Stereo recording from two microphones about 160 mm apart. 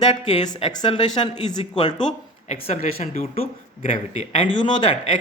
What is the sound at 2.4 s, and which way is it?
Speech, 40° left (ahead or behind).